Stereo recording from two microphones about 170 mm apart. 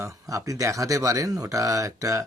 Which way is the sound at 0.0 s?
20° right (ahead or behind).